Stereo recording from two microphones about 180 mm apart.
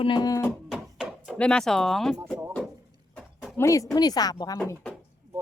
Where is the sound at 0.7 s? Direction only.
5° right (ahead or behind).